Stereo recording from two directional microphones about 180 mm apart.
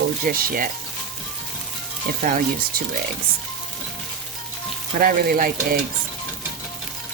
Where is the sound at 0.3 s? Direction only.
55° right (ahead or behind).